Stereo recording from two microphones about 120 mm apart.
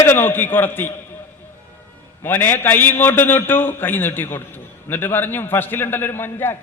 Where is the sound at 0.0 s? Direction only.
20° left (ahead or behind).